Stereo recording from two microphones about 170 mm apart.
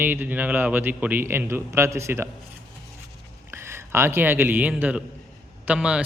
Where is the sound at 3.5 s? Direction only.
15° right (ahead or behind).